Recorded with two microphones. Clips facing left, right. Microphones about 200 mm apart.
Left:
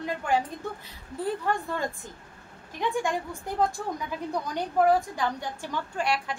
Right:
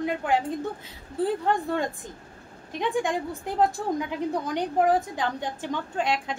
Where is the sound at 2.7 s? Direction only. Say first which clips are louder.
Right 2 dB; 20° right (ahead or behind).